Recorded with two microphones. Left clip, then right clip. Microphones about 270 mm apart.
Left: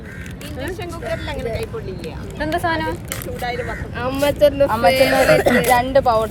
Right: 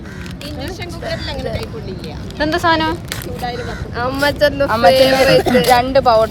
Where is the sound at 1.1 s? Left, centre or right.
Left.